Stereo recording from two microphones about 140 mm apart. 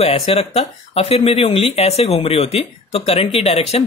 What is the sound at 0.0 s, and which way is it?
Speech, 50° left (ahead or behind).